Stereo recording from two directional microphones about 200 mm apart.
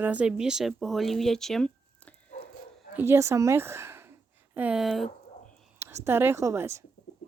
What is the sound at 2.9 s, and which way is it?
Speech, 10° right (ahead or behind).